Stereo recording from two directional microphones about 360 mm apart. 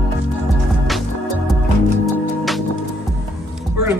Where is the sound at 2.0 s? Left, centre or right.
Centre.